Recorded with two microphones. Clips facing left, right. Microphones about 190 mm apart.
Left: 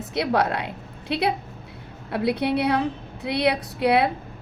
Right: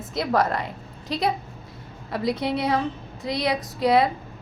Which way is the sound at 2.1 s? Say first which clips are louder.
Left 2 dB; 60° left (ahead or behind).